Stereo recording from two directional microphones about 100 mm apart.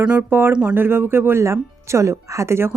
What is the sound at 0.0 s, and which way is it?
Speech, 10° right (ahead or behind).